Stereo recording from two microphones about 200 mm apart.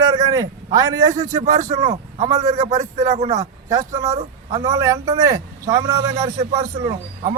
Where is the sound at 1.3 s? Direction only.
40° right (ahead or behind).